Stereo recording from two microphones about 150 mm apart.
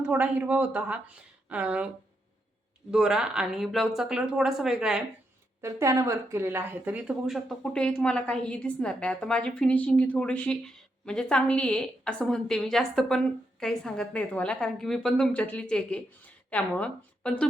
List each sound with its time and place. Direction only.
0.0 s speech: 10° right (ahead or behind)
2.9 s speech: 5° right (ahead or behind)
5.6 s speech: 20° right (ahead or behind); by 17.5 s 10° left (ahead or behind)